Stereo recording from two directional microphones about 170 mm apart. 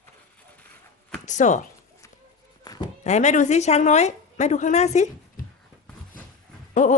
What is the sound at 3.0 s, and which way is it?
A woman's voice, 45° left (ahead or behind).